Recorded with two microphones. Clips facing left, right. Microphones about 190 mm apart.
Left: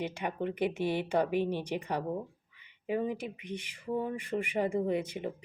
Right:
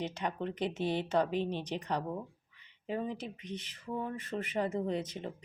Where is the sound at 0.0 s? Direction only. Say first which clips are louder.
Left 2 dB; 10° left (ahead or behind).